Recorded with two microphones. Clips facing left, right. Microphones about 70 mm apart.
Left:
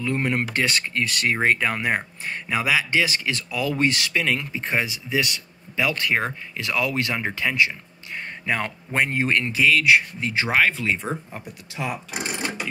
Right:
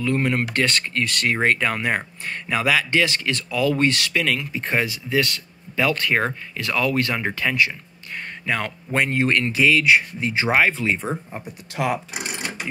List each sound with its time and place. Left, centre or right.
0.0 s speech: centre
9.6 s speech: centre
11.7 s speech: right